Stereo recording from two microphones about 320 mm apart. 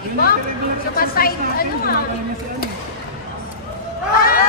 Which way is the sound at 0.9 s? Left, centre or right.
Left.